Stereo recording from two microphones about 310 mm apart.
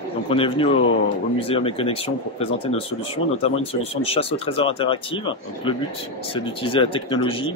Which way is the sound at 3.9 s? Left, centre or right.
Centre.